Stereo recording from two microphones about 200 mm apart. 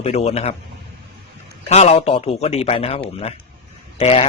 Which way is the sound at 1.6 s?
35° left (ahead or behind).